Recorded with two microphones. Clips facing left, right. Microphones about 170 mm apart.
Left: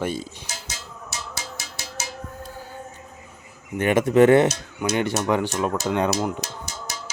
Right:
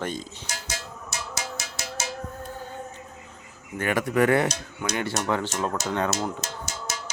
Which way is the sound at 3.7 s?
20° left (ahead or behind).